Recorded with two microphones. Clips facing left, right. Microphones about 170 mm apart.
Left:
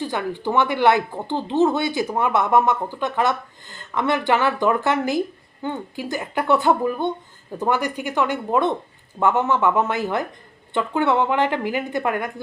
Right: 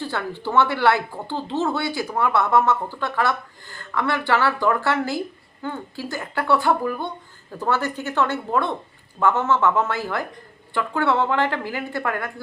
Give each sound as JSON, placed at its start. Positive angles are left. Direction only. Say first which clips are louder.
{"t": 0.0, "sound": "speech", "louder": "left 3 dB", "side_deg": 15}